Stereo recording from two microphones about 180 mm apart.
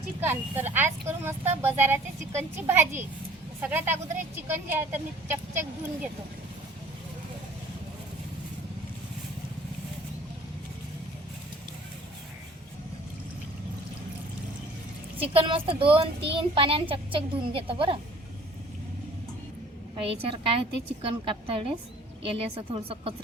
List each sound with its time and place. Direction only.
0.2 s speech: 10° right (ahead or behind)
15.2 s a child's voice: 30° right (ahead or behind)
20.0 s a child's voice: 30° right (ahead or behind)